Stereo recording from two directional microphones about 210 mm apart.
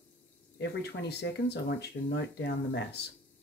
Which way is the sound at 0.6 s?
50° left (ahead or behind).